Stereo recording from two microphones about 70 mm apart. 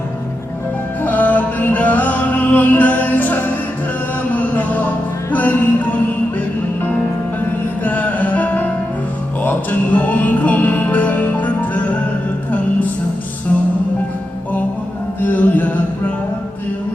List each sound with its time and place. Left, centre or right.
1.0 s music: left
7.9 s music: left
15.2 s music: left